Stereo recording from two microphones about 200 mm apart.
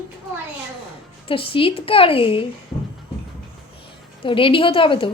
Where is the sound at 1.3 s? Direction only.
25° left (ahead or behind).